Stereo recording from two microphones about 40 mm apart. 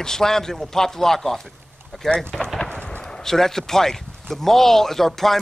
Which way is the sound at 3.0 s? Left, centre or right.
Centre.